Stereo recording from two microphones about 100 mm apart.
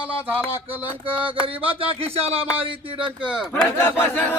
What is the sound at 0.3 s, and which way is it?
Music, 15° right (ahead or behind).